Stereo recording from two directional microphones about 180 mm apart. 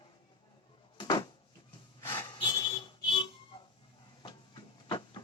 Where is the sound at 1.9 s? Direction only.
15° left (ahead or behind).